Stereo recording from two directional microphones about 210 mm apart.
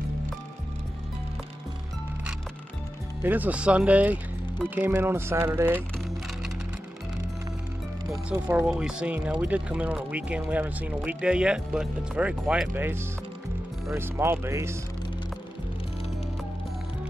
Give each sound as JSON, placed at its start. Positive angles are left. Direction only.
{"t": 3.2, "sound": "speech", "side_deg": -10}
{"t": 8.1, "sound": "speech", "side_deg": -10}